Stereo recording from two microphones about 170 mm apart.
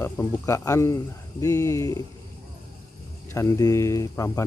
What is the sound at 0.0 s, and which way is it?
Speech, 15° left (ahead or behind).